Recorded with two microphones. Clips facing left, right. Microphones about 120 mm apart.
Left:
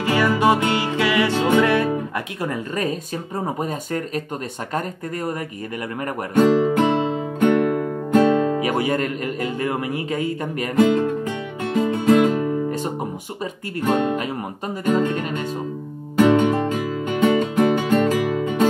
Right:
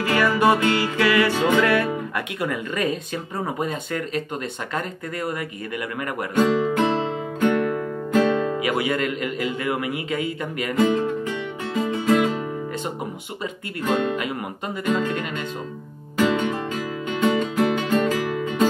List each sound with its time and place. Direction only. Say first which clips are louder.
0.0 s music: left 1 dB; 20° left (ahead or behind)
3.4 s speech: left 1 dB; 35° left (ahead or behind)
6.3 s music: left 4 dB; 45° left (ahead or behind)
7.3 s music: left 3 dB; 50° left (ahead or behind)
10.8 s music: left 3 dB; 55° left (ahead or behind)
13.4 s speech: left 3 dB; 40° left (ahead or behind)
16.2 s music: left 6 dB; 50° left (ahead or behind)